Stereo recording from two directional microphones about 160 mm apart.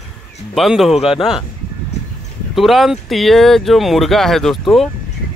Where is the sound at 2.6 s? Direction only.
Centre (ahead or behind).